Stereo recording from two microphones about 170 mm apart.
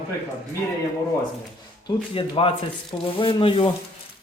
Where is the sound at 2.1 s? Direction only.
30° left (ahead or behind).